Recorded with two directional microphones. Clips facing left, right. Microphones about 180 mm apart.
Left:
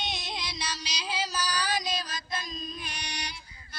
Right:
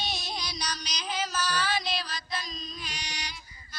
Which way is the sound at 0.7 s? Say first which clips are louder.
Even; 30° left (ahead or behind).